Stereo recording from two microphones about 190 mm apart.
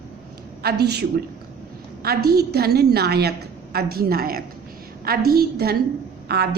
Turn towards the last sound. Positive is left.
turn(degrees=-55)  # may be behind; listen again after turning